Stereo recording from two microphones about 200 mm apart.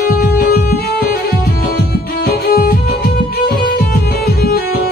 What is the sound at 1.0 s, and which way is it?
Music, 50° left (ahead or behind).